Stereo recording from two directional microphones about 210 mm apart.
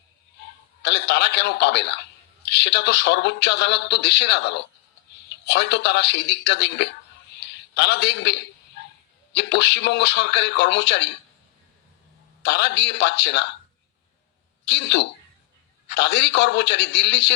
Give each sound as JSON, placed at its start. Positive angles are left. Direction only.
{"t": 0.8, "sound": "a man's voice", "side_deg": 55}
{"t": 7.3, "sound": "a sound", "side_deg": 55}
{"t": 9.3, "sound": "a man's voice", "side_deg": 55}
{"t": 12.4, "sound": "a man's voice", "side_deg": 55}
{"t": 14.7, "sound": "a man's voice", "side_deg": 55}